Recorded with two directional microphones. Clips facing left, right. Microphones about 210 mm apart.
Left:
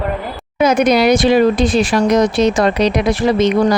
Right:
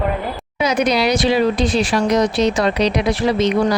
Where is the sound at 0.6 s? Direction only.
50° left (ahead or behind).